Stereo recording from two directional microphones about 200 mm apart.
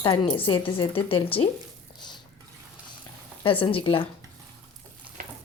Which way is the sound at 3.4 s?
25° left (ahead or behind).